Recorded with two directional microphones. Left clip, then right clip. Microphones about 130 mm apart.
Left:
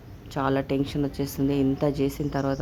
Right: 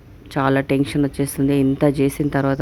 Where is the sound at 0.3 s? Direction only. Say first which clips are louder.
Right 7 dB; 35° right (ahead or behind).